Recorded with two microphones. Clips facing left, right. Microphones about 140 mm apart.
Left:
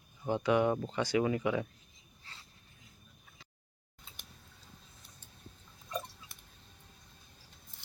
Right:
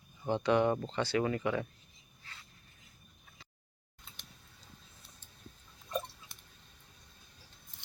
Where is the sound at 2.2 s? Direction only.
30° left (ahead or behind).